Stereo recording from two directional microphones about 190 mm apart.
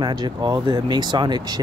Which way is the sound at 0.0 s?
20° right (ahead or behind).